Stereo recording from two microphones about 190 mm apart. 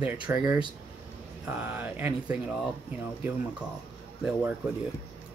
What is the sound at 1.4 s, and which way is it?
Speech, 5° right (ahead or behind).